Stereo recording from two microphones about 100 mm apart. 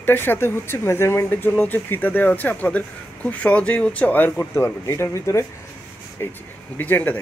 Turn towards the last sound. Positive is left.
turn(degrees=20)  # may be behind; listen again after turning